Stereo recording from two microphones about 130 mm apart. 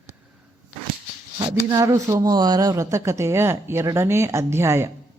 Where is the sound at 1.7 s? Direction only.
25° right (ahead or behind).